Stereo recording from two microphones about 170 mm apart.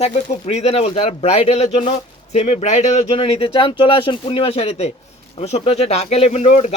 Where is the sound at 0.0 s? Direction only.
40° left (ahead or behind).